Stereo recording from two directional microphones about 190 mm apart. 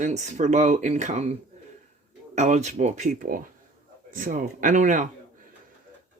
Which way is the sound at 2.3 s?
40° right (ahead or behind).